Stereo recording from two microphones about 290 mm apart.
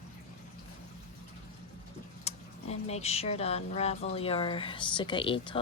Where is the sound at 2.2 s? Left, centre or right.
Left.